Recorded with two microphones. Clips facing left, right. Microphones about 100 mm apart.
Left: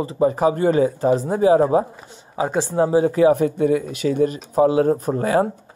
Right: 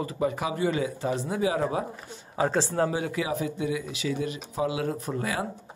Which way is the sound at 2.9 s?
35° left (ahead or behind).